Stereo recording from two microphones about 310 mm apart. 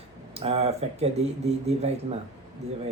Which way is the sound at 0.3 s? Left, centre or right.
Centre.